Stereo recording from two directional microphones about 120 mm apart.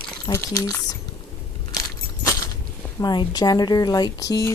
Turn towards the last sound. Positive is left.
turn(degrees=30)  # may be behind; listen again after turning